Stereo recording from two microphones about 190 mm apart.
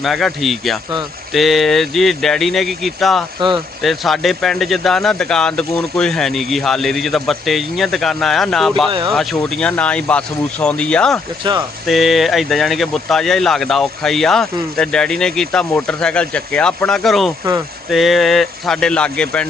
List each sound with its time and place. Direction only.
0.0 s speech: centre (ahead or behind)
11.4 s speech: 25° right (ahead or behind)
11.9 s speech: centre (ahead or behind)